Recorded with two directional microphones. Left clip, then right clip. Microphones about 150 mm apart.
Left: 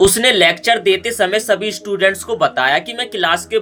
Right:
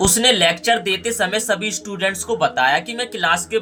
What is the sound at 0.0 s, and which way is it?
Speech, 30° left (ahead or behind).